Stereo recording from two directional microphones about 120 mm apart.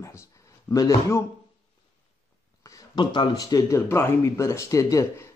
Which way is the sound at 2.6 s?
35° left (ahead or behind).